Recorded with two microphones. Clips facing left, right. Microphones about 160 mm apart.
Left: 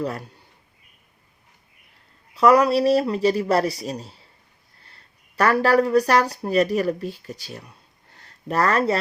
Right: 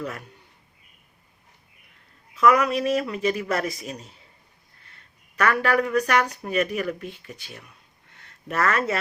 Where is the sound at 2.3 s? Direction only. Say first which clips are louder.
Left 4 dB; 35° left (ahead or behind).